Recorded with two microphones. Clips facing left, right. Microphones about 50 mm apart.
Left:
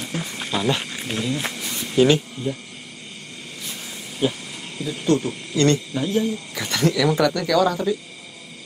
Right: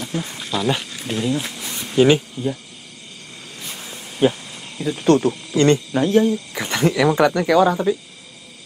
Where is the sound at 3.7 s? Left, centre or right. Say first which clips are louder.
Right 2 dB; right.